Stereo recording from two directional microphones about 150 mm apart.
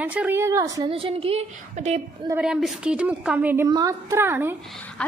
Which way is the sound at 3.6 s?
25° right (ahead or behind).